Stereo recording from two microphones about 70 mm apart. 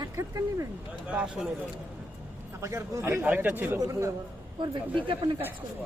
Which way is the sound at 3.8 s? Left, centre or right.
Right.